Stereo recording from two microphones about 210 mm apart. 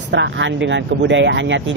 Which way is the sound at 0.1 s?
60° right (ahead or behind).